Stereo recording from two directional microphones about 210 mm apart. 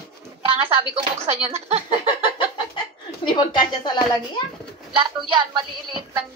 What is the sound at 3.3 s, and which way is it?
Speech, 20° left (ahead or behind).